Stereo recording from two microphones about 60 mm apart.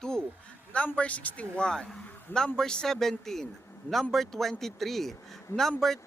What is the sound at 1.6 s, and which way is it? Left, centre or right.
Speech, centre.